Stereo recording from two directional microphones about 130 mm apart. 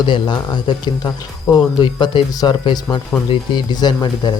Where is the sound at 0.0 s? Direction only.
35° left (ahead or behind).